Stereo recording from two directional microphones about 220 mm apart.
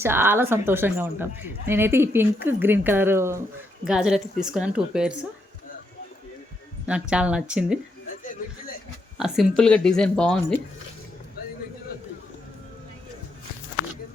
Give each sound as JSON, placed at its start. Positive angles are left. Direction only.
{"t": 0.0, "sound": "a woman's voice", "side_deg": -10}
{"t": 6.8, "sound": "a woman's voice", "side_deg": -5}
{"t": 8.1, "sound": "speech", "side_deg": 40}
{"t": 9.1, "sound": "a woman's voice", "side_deg": 0}